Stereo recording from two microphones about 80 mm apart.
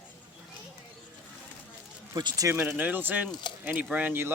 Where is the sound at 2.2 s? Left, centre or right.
Right.